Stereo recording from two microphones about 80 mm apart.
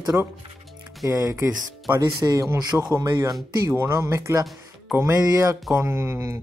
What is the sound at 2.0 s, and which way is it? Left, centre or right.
Speech, right.